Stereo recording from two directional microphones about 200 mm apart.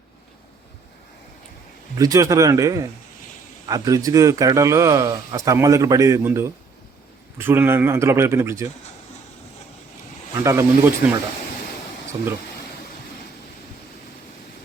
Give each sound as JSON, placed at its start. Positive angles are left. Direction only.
{"t": 2.0, "sound": "a man's voice", "side_deg": -15}
{"t": 10.4, "sound": "a man's voice", "side_deg": -15}